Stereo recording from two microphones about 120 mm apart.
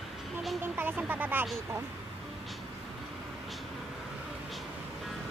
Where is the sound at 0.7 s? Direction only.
15° right (ahead or behind).